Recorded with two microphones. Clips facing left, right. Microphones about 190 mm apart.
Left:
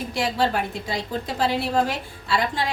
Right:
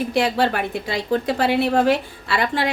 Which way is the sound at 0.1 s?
65° right (ahead or behind).